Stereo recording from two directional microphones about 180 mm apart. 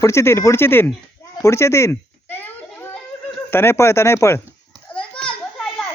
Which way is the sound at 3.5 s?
15° left (ahead or behind).